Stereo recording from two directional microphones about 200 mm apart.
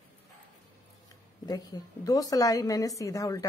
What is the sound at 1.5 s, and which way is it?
A woman's voice, 15° left (ahead or behind).